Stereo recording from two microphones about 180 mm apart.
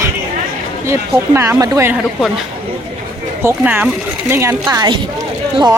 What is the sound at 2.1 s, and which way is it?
Speech, centre (ahead or behind).